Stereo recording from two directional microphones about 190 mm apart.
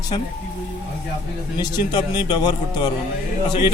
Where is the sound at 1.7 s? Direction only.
25° left (ahead or behind).